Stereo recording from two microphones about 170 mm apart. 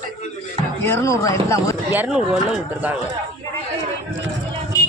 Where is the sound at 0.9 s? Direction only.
15° left (ahead or behind).